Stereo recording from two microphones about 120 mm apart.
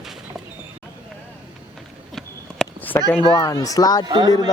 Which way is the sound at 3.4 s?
30° left (ahead or behind).